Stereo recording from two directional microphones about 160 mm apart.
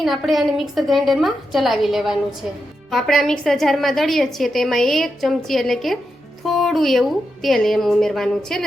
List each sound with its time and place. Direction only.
0.0 s a woman's voice: centre (ahead or behind)